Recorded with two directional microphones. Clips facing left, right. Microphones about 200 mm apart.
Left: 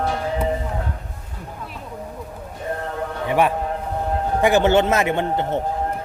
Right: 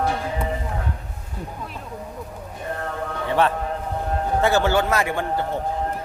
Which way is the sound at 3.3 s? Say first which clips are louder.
Left 2 dB; 15° left (ahead or behind).